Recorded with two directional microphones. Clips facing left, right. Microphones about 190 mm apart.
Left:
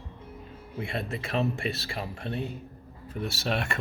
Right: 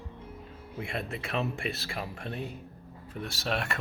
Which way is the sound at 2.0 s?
30° left (ahead or behind).